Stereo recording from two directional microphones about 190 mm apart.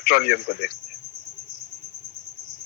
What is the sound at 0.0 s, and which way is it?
Speech, 50° left (ahead or behind).